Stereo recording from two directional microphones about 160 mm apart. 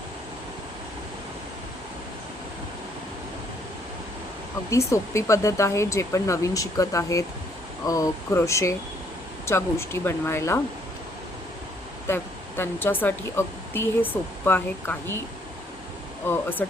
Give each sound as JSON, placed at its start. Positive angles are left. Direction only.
{"t": 4.7, "sound": "speech", "side_deg": 20}
{"t": 12.0, "sound": "speech", "side_deg": 15}
{"t": 16.2, "sound": "speech", "side_deg": 15}